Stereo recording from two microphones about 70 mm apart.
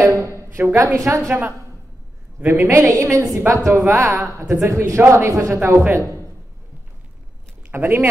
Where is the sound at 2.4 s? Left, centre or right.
Right.